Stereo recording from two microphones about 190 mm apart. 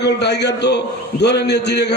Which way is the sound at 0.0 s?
65° left (ahead or behind).